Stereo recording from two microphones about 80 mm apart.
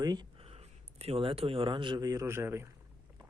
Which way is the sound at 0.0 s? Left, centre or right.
Right.